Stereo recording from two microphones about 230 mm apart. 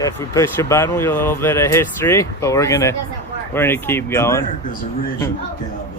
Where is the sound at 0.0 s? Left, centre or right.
Centre.